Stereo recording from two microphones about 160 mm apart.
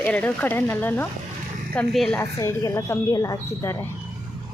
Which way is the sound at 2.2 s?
20° left (ahead or behind).